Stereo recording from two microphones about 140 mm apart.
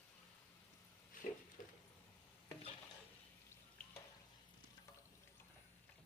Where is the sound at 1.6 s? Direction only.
65° left (ahead or behind).